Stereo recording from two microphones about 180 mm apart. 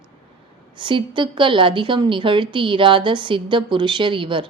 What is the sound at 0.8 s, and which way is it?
A woman's voice, 25° right (ahead or behind).